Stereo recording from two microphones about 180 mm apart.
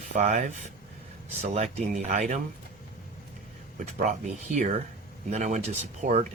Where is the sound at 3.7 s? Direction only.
40° right (ahead or behind).